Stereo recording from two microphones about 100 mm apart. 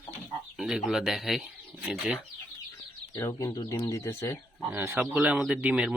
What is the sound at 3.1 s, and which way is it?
Speech, 30° left (ahead or behind).